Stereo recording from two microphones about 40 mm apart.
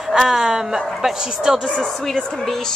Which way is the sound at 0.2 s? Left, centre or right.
Centre.